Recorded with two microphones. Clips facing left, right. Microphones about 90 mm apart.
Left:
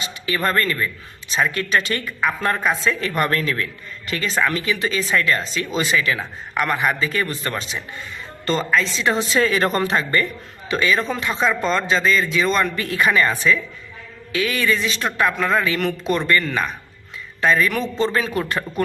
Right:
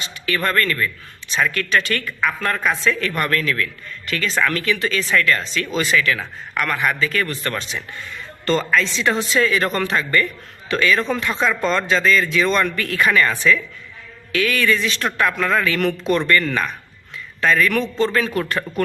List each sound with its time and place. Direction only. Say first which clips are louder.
0.3 s a man's voice: right 1 dB; 20° left (ahead or behind)
4.3 s a man's voice: right 1 dB; 10° left (ahead or behind)
9.4 s a man's voice: left 1 dB; 30° left (ahead or behind); by 16.7 s 5° left (ahead or behind)
17.4 s a man's voice: right 1 dB; 15° left (ahead or behind)